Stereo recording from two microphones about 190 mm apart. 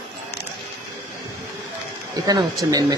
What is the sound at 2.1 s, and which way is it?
Speech, 20° right (ahead or behind).